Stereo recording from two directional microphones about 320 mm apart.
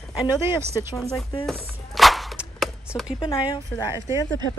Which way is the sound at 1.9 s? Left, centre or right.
Centre.